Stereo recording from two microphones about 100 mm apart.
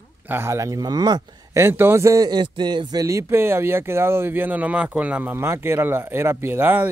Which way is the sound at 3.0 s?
25° right (ahead or behind).